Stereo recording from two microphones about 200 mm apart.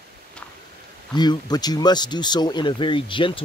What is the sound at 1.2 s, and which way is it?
Speech, 20° left (ahead or behind).